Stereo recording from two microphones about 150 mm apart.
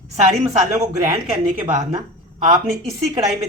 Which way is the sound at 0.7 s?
20° right (ahead or behind).